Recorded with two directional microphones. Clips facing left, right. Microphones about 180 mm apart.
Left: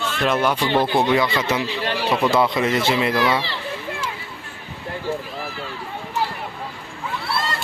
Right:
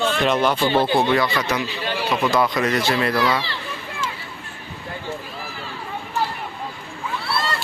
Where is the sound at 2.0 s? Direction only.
10° left (ahead or behind).